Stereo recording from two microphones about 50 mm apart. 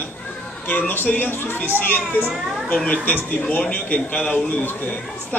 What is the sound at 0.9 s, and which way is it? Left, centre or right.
A man's voice, left.